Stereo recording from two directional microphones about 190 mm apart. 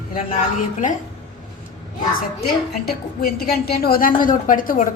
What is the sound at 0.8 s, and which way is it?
Speech, 40° left (ahead or behind).